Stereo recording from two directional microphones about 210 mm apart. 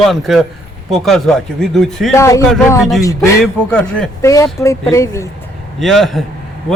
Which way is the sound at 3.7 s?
5° left (ahead or behind).